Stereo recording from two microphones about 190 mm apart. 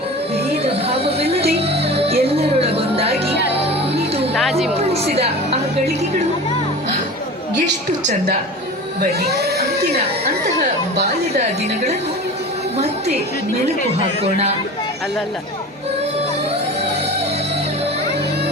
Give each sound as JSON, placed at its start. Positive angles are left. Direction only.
{"t": 0.3, "sound": "music", "side_deg": -30}
{"t": 4.4, "sound": "speech", "side_deg": 0}
{"t": 4.7, "sound": "a woman's voice", "side_deg": -35}
{"t": 9.0, "sound": "speech", "side_deg": -55}
{"t": 12.7, "sound": "a sound", "side_deg": -35}
{"t": 14.2, "sound": "a woman's voice", "side_deg": -30}